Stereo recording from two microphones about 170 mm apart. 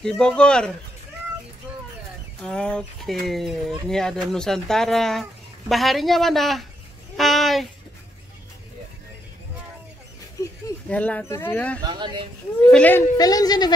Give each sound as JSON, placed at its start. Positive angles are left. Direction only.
{"t": 0.0, "sound": "speech", "side_deg": 5}
{"t": 2.4, "sound": "speech", "side_deg": 5}
{"t": 10.9, "sound": "speech", "side_deg": 10}
{"t": 11.8, "sound": "speech", "side_deg": -25}
{"t": 12.7, "sound": "speech", "side_deg": 10}
{"t": 13.2, "sound": "speech", "side_deg": 20}